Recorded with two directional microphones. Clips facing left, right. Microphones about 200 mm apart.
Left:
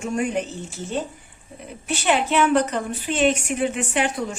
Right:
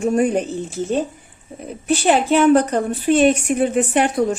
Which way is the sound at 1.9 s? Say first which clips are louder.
Right 6 dB; 35° right (ahead or behind).